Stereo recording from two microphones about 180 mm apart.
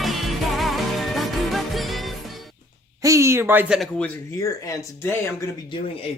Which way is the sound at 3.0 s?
15° right (ahead or behind).